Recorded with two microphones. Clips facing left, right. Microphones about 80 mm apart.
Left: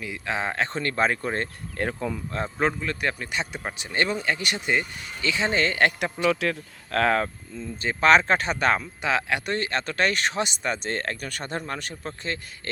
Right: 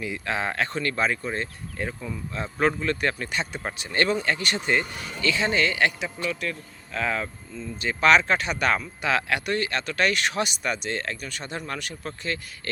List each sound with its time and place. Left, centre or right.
0.3 s speech: left
2.3 s speech: left
2.8 s speech: centre; by 6.1 s left
6.2 s speech: left
11.6 s speech: left